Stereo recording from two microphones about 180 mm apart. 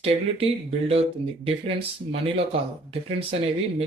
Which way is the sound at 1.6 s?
30° right (ahead or behind).